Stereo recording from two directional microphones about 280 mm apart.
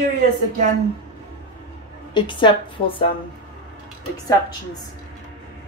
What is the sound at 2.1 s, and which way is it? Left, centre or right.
Speech, centre.